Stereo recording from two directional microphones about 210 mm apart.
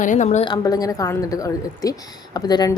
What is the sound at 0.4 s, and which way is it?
Speech, 20° left (ahead or behind).